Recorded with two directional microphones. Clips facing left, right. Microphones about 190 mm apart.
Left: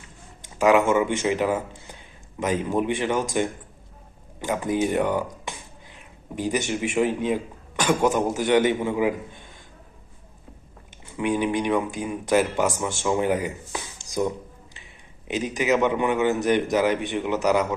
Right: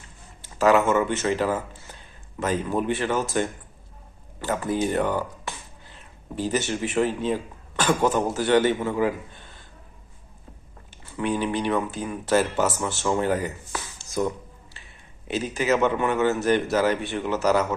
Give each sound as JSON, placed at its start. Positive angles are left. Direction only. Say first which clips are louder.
{"t": 0.4, "sound": "a man's voice", "louder": "left 1 dB", "side_deg": 15}
{"t": 11.2, "sound": "a man's voice", "louder": "left 2 dB", "side_deg": 15}